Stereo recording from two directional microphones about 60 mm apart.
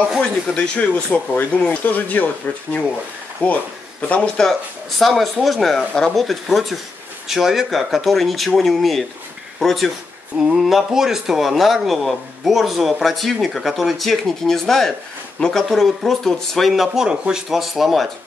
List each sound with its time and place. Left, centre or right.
0.2 s speech: centre
3.4 s speech: left
4.4 s speech: centre